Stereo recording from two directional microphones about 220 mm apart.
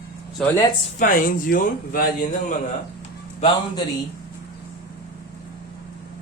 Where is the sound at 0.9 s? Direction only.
40° left (ahead or behind).